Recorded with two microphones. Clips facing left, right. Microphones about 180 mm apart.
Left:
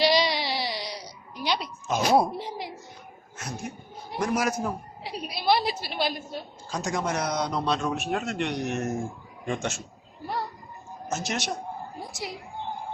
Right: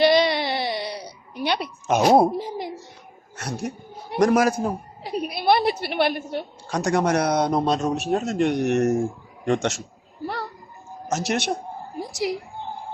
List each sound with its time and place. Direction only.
0.0 s a sound: 55° right (ahead or behind)
3.3 s a woman's voice: 70° right (ahead or behind)
4.4 s a man's voice: 30° right (ahead or behind)
5.0 s a woman's voice: 55° right (ahead or behind); by 9.8 s 75° right (ahead or behind)
11.1 s a woman's voice: 65° right (ahead or behind)